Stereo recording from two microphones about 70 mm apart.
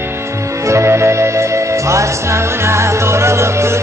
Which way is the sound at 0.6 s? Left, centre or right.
Right.